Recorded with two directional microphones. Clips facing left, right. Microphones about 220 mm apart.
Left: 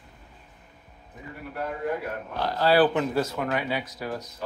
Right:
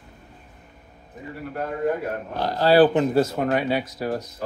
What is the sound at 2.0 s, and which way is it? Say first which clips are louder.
Speech: right 3 dB; 40° right (ahead or behind).